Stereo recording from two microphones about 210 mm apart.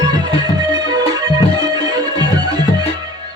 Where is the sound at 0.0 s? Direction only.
20° right (ahead or behind).